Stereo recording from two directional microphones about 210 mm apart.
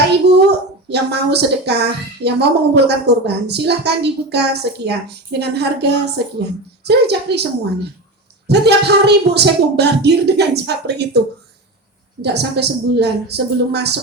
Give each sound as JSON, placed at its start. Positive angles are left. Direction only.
{"t": 0.2, "sound": "a sound", "side_deg": -50}
{"t": 0.9, "sound": "a woman's voice", "side_deg": -50}
{"t": 8.4, "sound": "a woman's voice", "side_deg": -50}
{"t": 12.2, "sound": "a woman's voice", "side_deg": -50}